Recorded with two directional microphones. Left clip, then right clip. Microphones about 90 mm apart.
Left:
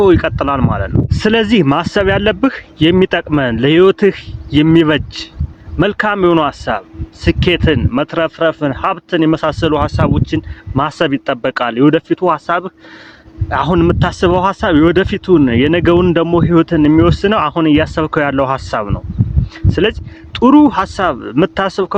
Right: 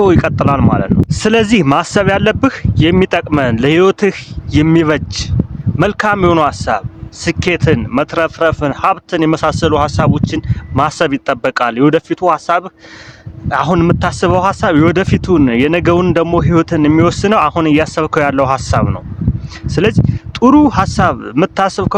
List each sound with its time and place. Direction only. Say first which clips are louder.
0.0 s speech: even; 35° right (ahead or behind)
16.0 s speech: even; 45° right (ahead or behind)
20.3 s speech: even; 25° right (ahead or behind)